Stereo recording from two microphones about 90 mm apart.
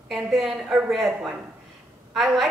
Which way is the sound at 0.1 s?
Centre (ahead or behind).